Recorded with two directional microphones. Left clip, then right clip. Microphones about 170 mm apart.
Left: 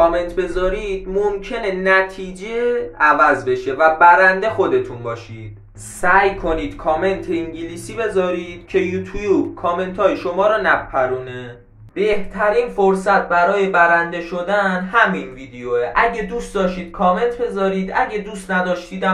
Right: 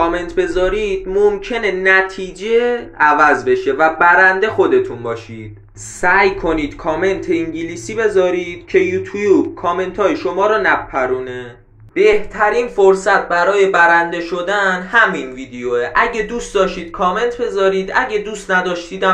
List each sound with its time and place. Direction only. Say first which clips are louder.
0.0 s speech: left 1 dB; 10° right (ahead or behind)